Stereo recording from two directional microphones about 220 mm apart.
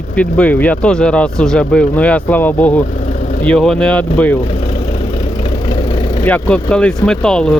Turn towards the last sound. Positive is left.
turn(degrees=5)  # may be behind; listen again after turning